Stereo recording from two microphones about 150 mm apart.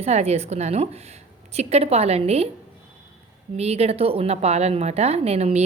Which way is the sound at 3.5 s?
45° right (ahead or behind).